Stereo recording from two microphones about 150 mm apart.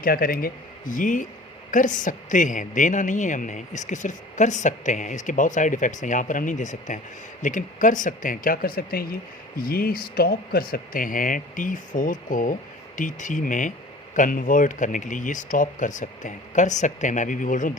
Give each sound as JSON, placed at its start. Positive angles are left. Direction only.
{"t": 0.0, "sound": "a woman's voice", "side_deg": 75}